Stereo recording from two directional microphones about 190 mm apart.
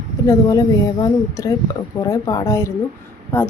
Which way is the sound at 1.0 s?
20° left (ahead or behind).